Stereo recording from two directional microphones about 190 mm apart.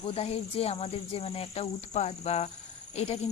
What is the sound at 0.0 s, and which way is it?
Speech, 30° left (ahead or behind).